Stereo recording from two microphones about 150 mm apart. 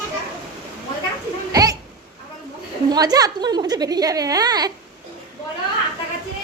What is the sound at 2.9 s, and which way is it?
A child's voice, 25° right (ahead or behind).